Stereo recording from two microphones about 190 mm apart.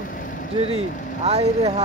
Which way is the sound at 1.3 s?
35° right (ahead or behind).